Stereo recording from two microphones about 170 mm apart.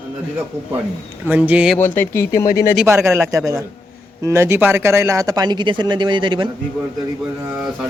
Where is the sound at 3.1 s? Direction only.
15° right (ahead or behind).